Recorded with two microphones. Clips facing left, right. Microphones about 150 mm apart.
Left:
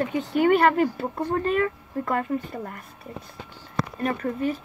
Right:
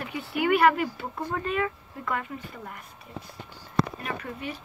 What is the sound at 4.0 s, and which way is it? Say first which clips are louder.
Speech: left 9 dB; 45° left (ahead or behind).